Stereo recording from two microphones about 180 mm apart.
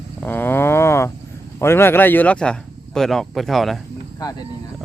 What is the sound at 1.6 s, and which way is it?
Speech, 15° left (ahead or behind).